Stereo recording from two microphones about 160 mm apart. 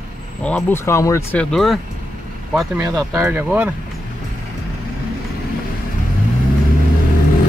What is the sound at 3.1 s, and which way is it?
Speech, 15° right (ahead or behind).